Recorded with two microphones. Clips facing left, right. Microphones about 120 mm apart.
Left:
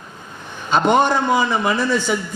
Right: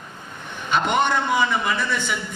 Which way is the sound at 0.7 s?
35° left (ahead or behind).